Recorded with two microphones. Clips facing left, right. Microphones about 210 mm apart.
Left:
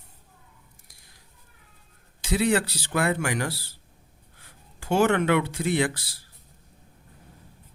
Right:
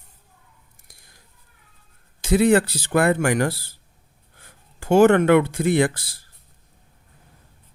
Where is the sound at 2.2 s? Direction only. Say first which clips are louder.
Right 7 dB; 50° right (ahead or behind).